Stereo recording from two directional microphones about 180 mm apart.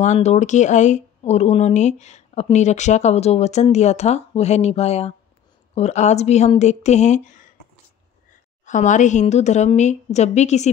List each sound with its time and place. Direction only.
0.0 s speech: 40° left (ahead or behind)
8.6 s speech: 45° left (ahead or behind)